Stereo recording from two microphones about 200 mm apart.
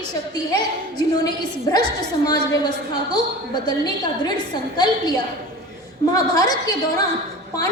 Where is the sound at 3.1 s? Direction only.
20° left (ahead or behind).